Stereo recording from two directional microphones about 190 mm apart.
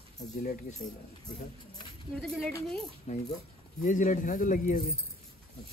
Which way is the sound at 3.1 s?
40° left (ahead or behind).